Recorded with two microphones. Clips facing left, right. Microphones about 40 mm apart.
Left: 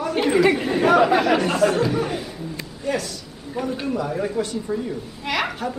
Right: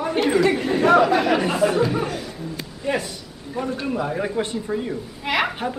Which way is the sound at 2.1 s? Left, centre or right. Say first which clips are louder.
Left 2 dB; centre.